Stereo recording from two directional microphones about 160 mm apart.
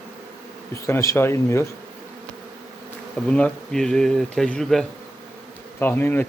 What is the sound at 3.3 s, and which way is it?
Speech, 5° left (ahead or behind).